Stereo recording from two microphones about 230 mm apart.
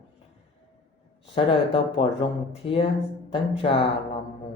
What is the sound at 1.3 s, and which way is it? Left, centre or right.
Speech, left.